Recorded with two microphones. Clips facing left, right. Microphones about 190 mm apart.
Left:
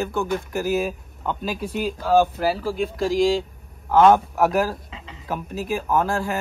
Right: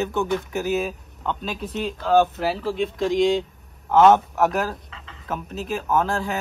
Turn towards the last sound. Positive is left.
turn(degrees=0)  # may be behind; listen again after turning